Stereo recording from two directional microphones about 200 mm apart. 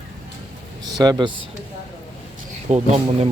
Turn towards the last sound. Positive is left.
turn(degrees=-30)  # may be behind; listen again after turning